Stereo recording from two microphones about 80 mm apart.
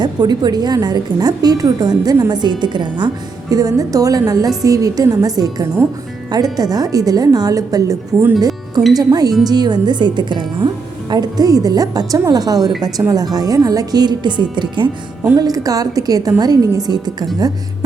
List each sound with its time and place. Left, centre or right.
0.0 s a woman's voice: right
2.3 s a woman's voice: right
3.5 s speech: right
8.4 s music: right
9.0 s a woman's voice: right
11.1 s a woman's voice: right
15.4 s a woman's voice: right